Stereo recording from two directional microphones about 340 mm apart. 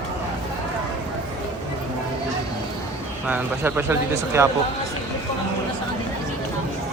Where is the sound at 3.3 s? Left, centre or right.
Centre.